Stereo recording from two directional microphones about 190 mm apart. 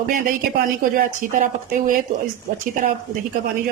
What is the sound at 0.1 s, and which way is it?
Speech, 45° right (ahead or behind).